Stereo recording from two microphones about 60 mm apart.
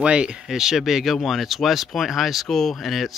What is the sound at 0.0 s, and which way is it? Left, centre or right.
Speech, centre.